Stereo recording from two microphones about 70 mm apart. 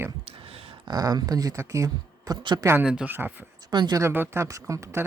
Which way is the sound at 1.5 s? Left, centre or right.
Right.